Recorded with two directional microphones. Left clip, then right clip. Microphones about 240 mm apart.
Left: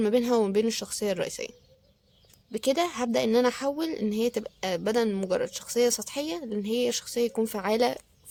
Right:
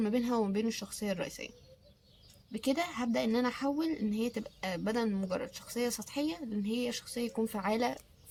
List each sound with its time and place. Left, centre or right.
0.0 s a woman's voice: left